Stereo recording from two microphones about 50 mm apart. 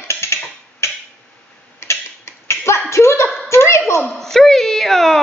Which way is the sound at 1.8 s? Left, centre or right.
Left.